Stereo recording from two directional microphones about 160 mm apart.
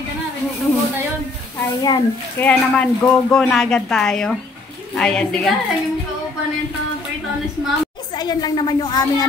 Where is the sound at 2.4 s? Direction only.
10° left (ahead or behind).